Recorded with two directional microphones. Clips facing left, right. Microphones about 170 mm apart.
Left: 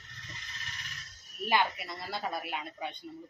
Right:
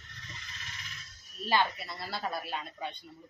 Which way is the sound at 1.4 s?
15° left (ahead or behind).